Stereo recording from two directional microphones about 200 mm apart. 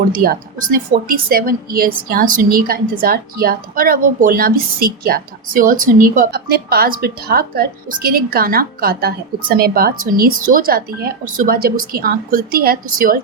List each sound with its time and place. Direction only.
0.1 s speech: 45° right (ahead or behind)